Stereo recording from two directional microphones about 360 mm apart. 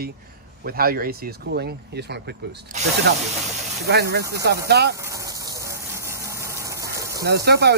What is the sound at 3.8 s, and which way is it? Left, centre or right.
Speech, right.